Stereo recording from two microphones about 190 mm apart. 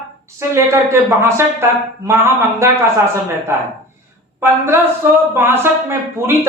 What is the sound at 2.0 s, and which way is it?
Speech, 15° right (ahead or behind).